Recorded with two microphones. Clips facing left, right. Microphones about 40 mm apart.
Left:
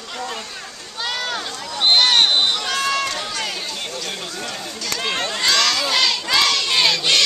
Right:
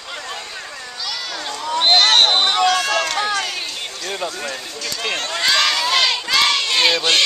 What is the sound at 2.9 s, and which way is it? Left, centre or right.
Run, right.